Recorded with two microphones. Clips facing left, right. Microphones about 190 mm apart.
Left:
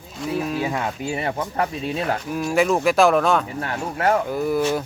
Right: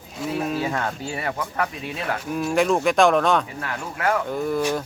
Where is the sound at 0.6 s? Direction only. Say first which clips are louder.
Left 1 dB; 10° left (ahead or behind).